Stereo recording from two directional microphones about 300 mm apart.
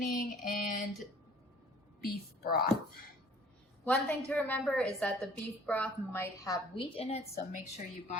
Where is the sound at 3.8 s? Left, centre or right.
Centre; by 7.6 s left.